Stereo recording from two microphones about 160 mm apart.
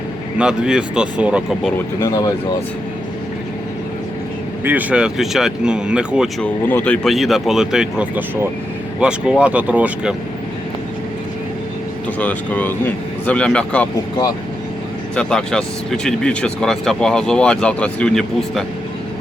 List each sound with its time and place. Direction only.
0.3 s speech: 5° right (ahead or behind)
2.0 s speech: 20° left (ahead or behind)
4.6 s speech: 10° right (ahead or behind)
6.4 s speech: 10° left (ahead or behind); by 10.2 s 5° right (ahead or behind)
12.2 s speech: 10° left (ahead or behind)
15.1 s speech: 5° left (ahead or behind)